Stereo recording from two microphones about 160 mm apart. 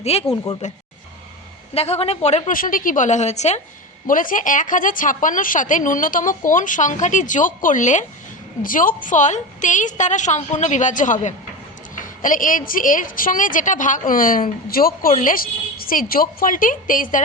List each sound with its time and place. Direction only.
0.0 s a woman's voice: 40° left (ahead or behind)
2.5 s a woman's voice: 60° left (ahead or behind)
4.0 s a woman's voice: 60° left (ahead or behind)